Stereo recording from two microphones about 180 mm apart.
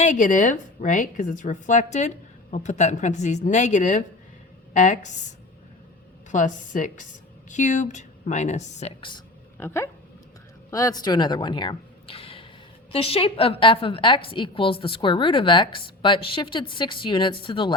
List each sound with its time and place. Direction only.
0.0 s a woman's voice: 45° left (ahead or behind)
6.3 s speech: 45° left (ahead or behind)
9.0 s a woman's voice: 25° left (ahead or behind)
9.6 s a woman's voice: 15° left (ahead or behind)